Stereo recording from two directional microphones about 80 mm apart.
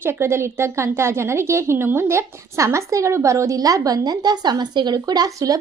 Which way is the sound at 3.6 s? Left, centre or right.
Right.